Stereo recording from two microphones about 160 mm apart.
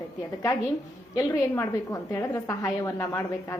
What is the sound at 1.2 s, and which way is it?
A woman's voice, 20° left (ahead or behind).